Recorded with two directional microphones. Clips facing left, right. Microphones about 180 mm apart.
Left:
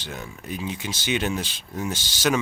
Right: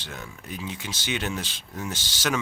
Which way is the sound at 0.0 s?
20° left (ahead or behind).